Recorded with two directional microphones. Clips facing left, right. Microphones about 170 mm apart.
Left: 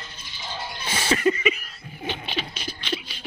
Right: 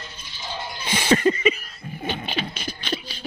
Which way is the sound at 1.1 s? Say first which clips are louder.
Right 3 dB; 35° right (ahead or behind).